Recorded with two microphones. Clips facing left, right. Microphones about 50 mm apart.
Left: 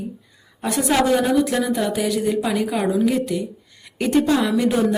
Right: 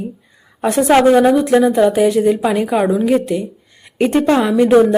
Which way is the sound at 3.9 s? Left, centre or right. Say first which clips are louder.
Right 5 dB; right.